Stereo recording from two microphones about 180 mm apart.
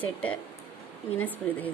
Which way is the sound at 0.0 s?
10° left (ahead or behind).